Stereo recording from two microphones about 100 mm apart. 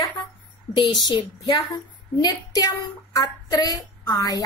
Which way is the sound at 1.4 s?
45° left (ahead or behind).